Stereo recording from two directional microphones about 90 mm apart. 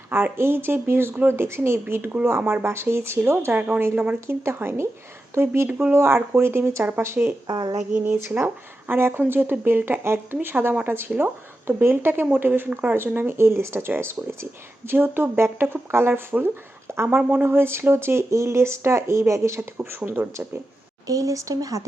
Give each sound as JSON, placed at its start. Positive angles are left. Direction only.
{"t": 0.1, "sound": "a woman's voice", "side_deg": -25}
{"t": 2.4, "sound": "speech", "side_deg": -15}
{"t": 2.6, "sound": "a woman's voice", "side_deg": -30}
{"t": 4.4, "sound": "a woman's voice", "side_deg": -30}
{"t": 7.4, "sound": "speech", "side_deg": -50}
{"t": 7.9, "sound": "a woman's voice", "side_deg": -25}
{"t": 21.1, "sound": "speech", "side_deg": -40}